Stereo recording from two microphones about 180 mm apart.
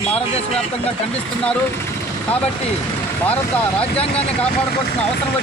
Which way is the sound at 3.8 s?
35° left (ahead or behind).